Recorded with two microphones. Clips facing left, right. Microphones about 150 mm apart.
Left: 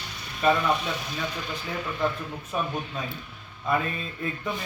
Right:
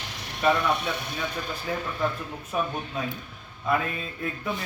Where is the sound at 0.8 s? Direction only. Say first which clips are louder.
Even; 55° right (ahead or behind).